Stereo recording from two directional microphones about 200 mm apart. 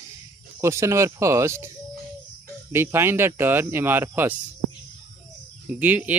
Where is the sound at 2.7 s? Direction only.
10° right (ahead or behind).